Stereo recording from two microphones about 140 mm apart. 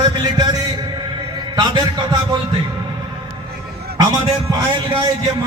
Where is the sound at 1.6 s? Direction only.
30° right (ahead or behind).